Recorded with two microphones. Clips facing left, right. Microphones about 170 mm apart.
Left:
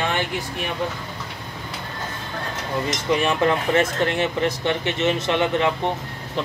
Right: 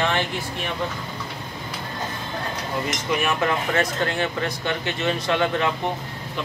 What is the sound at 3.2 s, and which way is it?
Speech, 25° left (ahead or behind).